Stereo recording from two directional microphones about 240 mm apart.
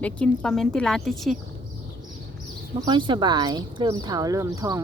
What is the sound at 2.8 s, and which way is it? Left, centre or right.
Speech, centre.